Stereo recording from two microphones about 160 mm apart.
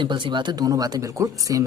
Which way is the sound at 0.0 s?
30° right (ahead or behind).